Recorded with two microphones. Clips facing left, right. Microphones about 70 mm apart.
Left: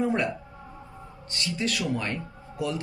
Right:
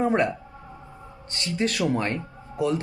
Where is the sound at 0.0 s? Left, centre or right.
Right.